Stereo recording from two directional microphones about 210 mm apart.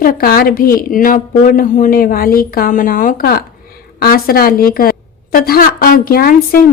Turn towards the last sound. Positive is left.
turn(degrees=45)  # may be behind; listen again after turning